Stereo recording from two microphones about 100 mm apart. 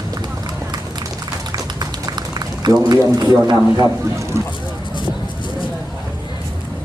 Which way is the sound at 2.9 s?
40° right (ahead or behind).